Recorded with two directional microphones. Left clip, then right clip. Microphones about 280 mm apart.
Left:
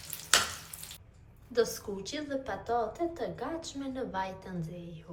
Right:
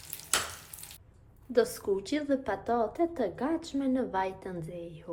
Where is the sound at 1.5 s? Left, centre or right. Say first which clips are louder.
Right 3 dB; right.